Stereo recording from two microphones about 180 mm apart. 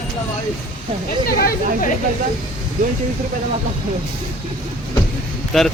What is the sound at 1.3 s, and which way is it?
Speech, 50° left (ahead or behind).